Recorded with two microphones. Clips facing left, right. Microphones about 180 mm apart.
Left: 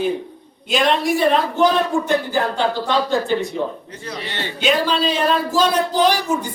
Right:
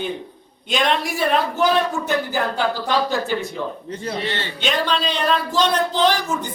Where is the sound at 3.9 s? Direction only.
30° right (ahead or behind).